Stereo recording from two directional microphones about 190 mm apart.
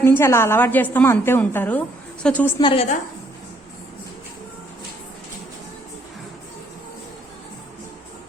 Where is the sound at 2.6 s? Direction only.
25° left (ahead or behind).